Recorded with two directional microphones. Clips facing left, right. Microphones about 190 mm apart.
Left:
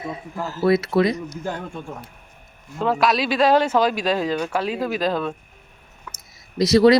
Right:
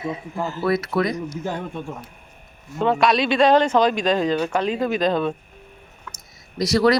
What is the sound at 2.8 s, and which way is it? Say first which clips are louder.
A man's voice: right 1 dB; centre (ahead or behind).